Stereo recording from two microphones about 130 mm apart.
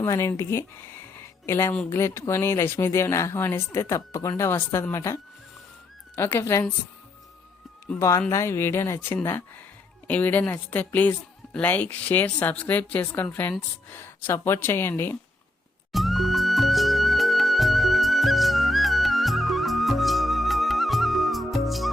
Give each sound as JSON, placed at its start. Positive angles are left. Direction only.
{"t": 0.0, "sound": "speech", "side_deg": 20}
{"t": 7.9, "sound": "a woman's voice", "side_deg": 25}
{"t": 15.9, "sound": "music", "side_deg": 0}